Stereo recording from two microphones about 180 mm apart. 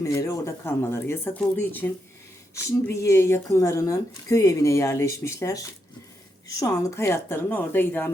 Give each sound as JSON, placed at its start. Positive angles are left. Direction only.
{"t": 0.0, "sound": "speech", "side_deg": 15}